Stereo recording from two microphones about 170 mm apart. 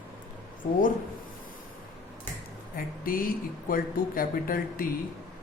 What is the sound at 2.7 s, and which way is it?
Speech, 55° left (ahead or behind).